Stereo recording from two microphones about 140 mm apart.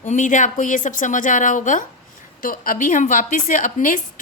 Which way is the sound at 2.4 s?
85° left.